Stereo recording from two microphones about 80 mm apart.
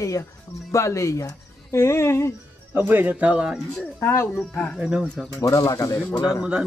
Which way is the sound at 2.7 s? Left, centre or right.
Right.